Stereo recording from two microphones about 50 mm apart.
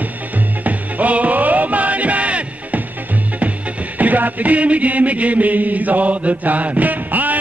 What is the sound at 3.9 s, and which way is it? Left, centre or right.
Chant, right.